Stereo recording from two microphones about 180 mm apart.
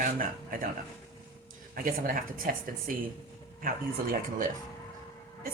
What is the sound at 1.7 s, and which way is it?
Speech, 50° right (ahead or behind).